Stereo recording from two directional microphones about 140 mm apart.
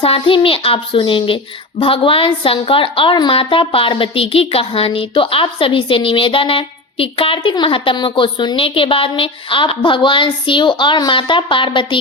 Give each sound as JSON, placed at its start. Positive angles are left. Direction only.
{"t": 0.0, "sound": "a woman's voice", "side_deg": 40}